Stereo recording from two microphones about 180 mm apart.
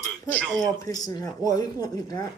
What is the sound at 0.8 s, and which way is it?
Speech, 20° left (ahead or behind).